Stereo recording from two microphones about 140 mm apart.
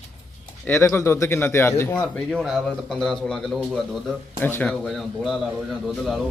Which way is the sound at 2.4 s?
Centre (ahead or behind).